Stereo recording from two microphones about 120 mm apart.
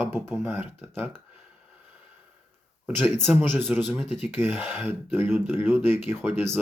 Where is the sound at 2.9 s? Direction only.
15° right (ahead or behind).